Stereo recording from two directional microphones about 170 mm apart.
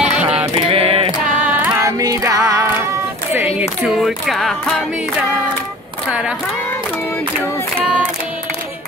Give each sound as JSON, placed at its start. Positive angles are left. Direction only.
{"t": 0.0, "sound": "music", "side_deg": -5}
{"t": 0.7, "sound": "a sound", "side_deg": -35}
{"t": 1.7, "sound": "music", "side_deg": -20}
{"t": 3.8, "sound": "music", "side_deg": 0}